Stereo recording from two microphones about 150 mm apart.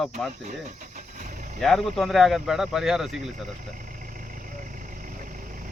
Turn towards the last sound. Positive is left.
turn(degrees=-65)  # may be behind; listen again after turning